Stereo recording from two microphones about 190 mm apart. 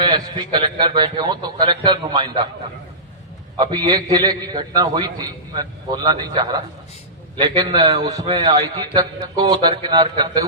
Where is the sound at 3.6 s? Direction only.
25° right (ahead or behind).